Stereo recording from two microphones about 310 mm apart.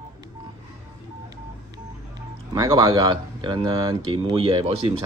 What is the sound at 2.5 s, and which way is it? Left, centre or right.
Speech, centre.